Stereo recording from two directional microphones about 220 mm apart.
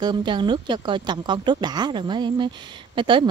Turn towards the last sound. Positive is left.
turn(degrees=-20)  # may be behind; listen again after turning